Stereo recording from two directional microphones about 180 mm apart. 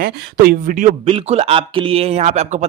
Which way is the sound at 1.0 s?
35° right (ahead or behind).